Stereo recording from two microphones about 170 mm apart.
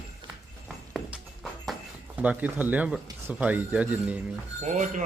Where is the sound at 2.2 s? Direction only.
10° right (ahead or behind).